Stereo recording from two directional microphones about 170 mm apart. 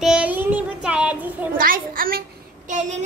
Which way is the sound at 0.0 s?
5° right (ahead or behind).